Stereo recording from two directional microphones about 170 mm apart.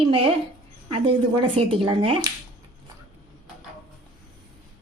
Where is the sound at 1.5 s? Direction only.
30° right (ahead or behind).